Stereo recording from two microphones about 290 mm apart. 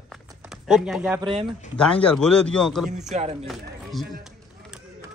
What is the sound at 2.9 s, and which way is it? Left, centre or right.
Speech, right.